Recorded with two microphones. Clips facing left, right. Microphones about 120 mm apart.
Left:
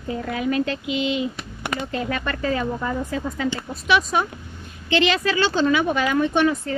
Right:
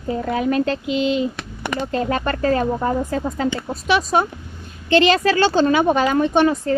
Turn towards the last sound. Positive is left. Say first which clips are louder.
# right 4 dB
turn(degrees=-35)  # may be behind; listen again after turning